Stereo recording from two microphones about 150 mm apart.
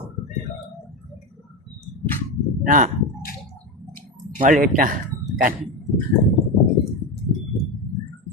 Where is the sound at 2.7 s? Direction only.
60° right (ahead or behind).